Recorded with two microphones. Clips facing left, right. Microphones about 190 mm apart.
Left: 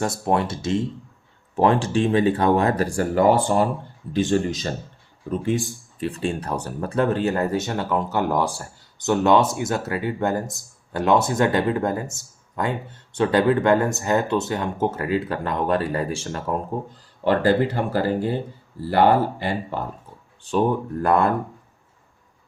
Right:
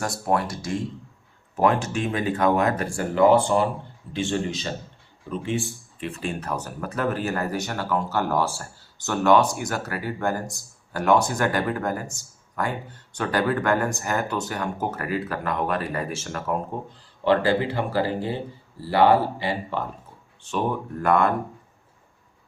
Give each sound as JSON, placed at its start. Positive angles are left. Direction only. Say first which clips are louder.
{"t": 0.0, "sound": "speech", "louder": "left 3 dB", "side_deg": 25}
{"t": 17.2, "sound": "speech", "louder": "left 2 dB", "side_deg": 45}
{"t": 20.4, "sound": "speech", "louder": "left 5 dB", "side_deg": 35}